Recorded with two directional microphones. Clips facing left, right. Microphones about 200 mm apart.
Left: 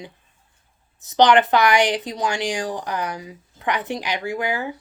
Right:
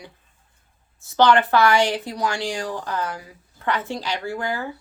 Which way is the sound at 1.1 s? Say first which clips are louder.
Left 2 dB; 15° left (ahead or behind).